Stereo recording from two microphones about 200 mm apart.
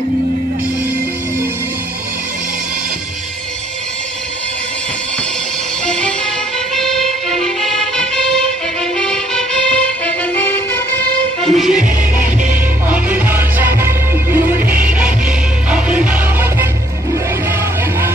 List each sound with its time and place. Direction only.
5.9 s music: 5° left (ahead or behind)
11.4 s music: centre (ahead or behind)
12.9 s music: 10° right (ahead or behind)